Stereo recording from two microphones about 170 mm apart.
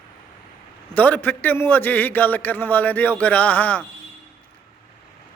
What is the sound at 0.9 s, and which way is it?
A man's voice, 10° left (ahead or behind).